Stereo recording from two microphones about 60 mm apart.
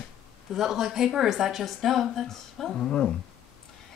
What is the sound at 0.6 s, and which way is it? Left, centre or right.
A woman's voice, centre.